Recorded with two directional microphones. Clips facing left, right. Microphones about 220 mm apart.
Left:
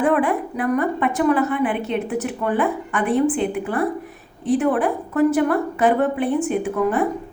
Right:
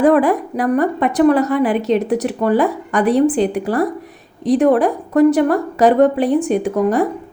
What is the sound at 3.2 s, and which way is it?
Speech, 90° right.